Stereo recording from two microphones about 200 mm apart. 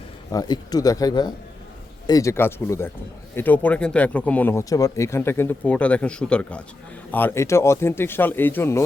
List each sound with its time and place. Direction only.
0.3 s speech: 20° left (ahead or behind)